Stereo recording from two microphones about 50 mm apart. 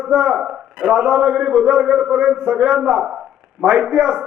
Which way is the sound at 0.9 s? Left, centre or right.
Right.